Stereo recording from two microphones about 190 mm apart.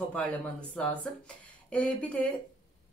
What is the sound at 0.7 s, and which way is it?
A woman's voice, 5° left (ahead or behind).